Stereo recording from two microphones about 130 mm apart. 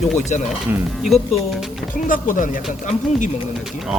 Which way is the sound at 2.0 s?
90° left.